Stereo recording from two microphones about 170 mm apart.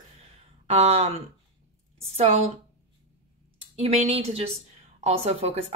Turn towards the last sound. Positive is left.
turn(degrees=-40)  # may be behind; listen again after turning